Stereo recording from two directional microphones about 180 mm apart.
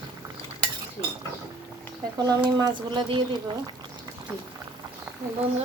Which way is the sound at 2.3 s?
20° right (ahead or behind).